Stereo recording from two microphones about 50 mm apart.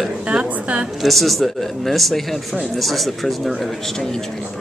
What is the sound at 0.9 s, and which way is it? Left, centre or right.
Speech, centre.